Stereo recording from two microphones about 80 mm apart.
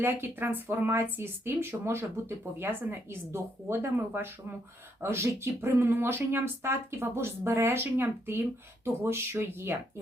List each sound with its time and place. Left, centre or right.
0.0 s speech: right